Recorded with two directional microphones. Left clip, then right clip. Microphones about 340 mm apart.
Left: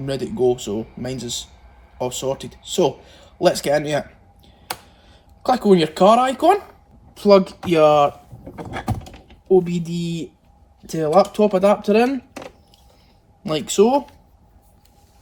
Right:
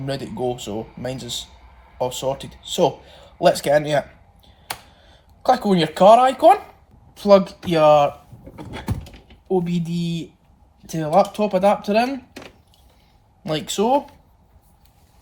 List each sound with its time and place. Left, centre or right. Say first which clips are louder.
0.0 s speech: left 5 dB; centre
4.4 s computer keyboard: left 1 dB; centre
7.2 s speech: even; centre
9.5 s speech: left 6 dB; centre
13.4 s speech: left 5 dB; centre